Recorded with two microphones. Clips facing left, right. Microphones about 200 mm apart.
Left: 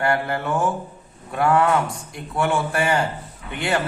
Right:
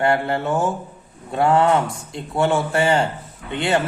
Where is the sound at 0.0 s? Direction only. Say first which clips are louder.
Right 3 dB; 25° right (ahead or behind).